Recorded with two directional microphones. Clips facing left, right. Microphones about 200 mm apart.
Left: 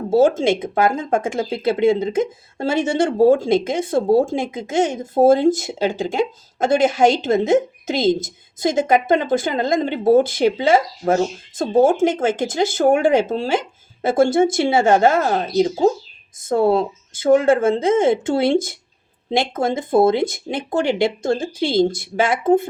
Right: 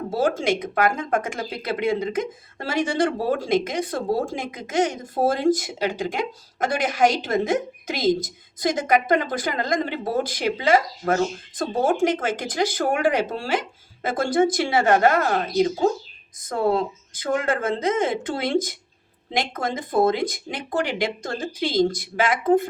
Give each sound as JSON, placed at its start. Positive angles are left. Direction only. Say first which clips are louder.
{"t": 0.1, "sound": "speech", "louder": "left 8 dB", "side_deg": 25}